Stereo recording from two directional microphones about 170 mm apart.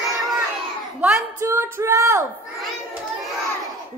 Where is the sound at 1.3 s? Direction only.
15° right (ahead or behind).